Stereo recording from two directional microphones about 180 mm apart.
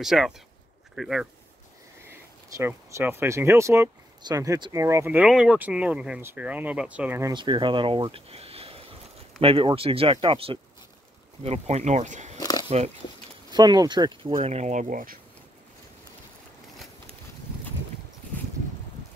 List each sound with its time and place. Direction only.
0.0 s speech: centre (ahead or behind)
2.0 s speech: 15° right (ahead or behind)
7.3 s speech: 25° right (ahead or behind)
12.4 s a sound: 20° left (ahead or behind)
12.6 s speech: 35° right (ahead or behind)
13.5 s speech: 25° right (ahead or behind); by 15.1 s 45° right (ahead or behind)